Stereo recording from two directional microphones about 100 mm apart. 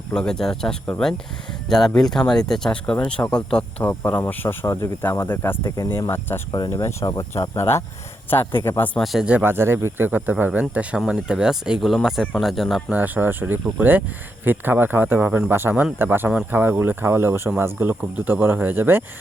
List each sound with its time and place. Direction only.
0.1 s speech: 5° left (ahead or behind)
3.8 s speech: 20° left (ahead or behind)
6.5 s speech: 40° left (ahead or behind); by 8.9 s 25° left (ahead or behind)
9.4 s speech: 25° right (ahead or behind); by 12.8 s centre (ahead or behind)
12.9 s speech: 20° right (ahead or behind)